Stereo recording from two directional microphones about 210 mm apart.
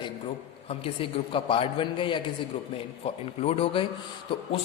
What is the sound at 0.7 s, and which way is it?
A man's voice, 25° left (ahead or behind).